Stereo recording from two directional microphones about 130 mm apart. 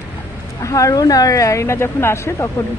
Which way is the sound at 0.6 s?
25° left (ahead or behind).